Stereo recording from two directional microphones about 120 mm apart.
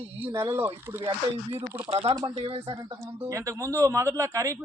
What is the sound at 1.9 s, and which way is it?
Speech, 60° right (ahead or behind).